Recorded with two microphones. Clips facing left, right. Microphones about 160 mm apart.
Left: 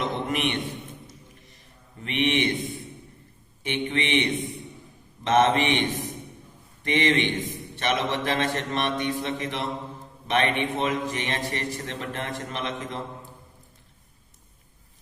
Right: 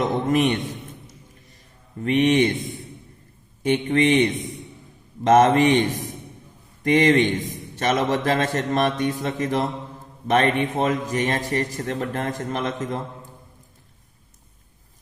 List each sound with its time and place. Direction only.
0.0 s a man's voice: 40° right (ahead or behind)
2.0 s a man's voice: 40° right (ahead or behind)
3.6 s speech: 40° right (ahead or behind)
6.8 s a man's voice: 40° right (ahead or behind)